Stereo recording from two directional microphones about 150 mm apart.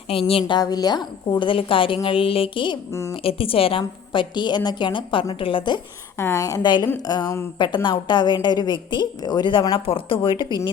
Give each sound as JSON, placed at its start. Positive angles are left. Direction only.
{"t": 0.1, "sound": "a woman's voice", "side_deg": 40}
{"t": 2.9, "sound": "a woman's voice", "side_deg": 20}
{"t": 3.2, "sound": "a woman's voice", "side_deg": 40}
{"t": 6.1, "sound": "a woman's voice", "side_deg": 15}